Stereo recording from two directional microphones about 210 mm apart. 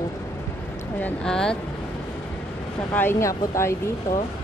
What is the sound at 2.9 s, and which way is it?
Speech, 10° left (ahead or behind).